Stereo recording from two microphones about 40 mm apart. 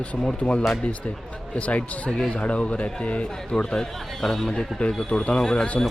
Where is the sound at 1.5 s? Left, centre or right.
Left.